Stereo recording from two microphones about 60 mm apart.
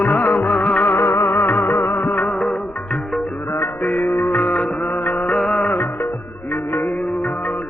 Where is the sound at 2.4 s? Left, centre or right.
Centre.